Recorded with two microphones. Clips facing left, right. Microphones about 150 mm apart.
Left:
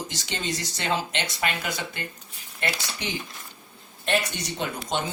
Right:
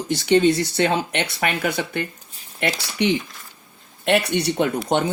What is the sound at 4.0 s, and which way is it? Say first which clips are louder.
A man's voice: right 7 dB; 65° right (ahead or behind).